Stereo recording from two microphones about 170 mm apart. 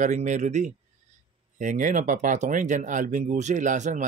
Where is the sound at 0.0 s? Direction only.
45° right (ahead or behind).